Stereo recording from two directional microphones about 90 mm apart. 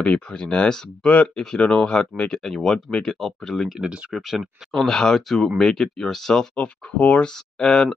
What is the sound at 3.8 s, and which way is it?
Speech, 10° right (ahead or behind).